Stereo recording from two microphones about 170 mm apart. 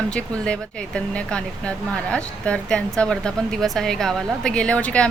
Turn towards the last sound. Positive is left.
turn(degrees=5)  # may be behind; listen again after turning